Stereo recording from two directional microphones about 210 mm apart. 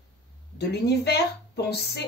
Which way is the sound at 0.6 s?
50° left (ahead or behind).